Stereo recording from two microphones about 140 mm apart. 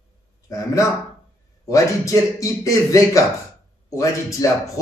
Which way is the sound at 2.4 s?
25° left (ahead or behind).